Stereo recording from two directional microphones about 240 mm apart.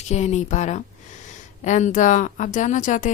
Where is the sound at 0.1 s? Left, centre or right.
Left.